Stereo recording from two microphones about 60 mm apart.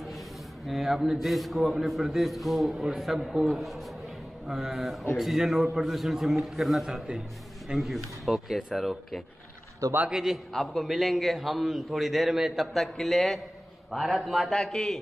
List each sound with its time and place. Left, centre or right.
0.7 s a man's voice: centre
9.8 s a man's voice: right
10.1 s a man's voice: centre
10.5 s a man's voice: centre
12.7 s a man's voice: centre